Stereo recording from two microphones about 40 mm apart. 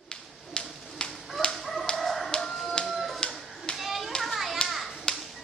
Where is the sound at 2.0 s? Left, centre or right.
Centre.